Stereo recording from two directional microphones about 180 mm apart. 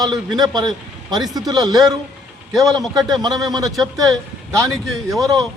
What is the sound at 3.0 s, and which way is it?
Speech, 20° right (ahead or behind).